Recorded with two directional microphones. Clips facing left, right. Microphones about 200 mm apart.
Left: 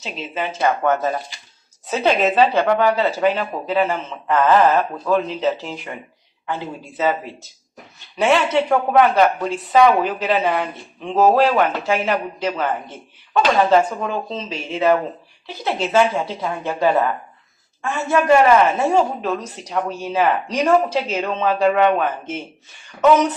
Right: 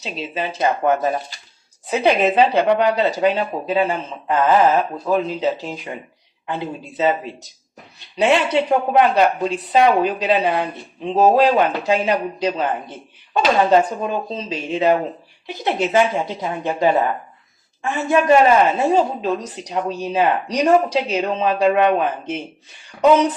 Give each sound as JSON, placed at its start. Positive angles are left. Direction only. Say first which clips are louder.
{"t": 0.6, "sound": "speech", "louder": "right 1 dB", "side_deg": -20}
{"t": 8.2, "sound": "speech", "louder": "even", "side_deg": -15}
{"t": 10.4, "sound": "speech", "louder": "right 1 dB", "side_deg": -35}
{"t": 11.3, "sound": "speech", "louder": "right 1 dB", "side_deg": -15}